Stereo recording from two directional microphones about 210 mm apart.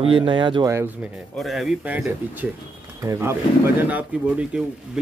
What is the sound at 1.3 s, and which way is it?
Speech, centre (ahead or behind).